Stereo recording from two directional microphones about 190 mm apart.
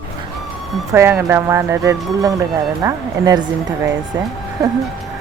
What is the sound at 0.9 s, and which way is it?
A woman's voice, 10° right (ahead or behind).